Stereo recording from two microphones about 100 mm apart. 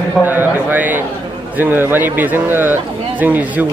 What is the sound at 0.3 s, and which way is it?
A man's voice, 20° right (ahead or behind).